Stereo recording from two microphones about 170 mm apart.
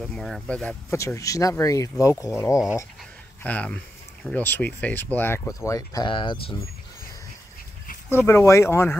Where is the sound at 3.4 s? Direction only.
10° left (ahead or behind); by 6.5 s 30° left (ahead or behind).